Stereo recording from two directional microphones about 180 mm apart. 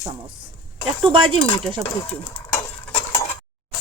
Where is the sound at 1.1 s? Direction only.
30° right (ahead or behind).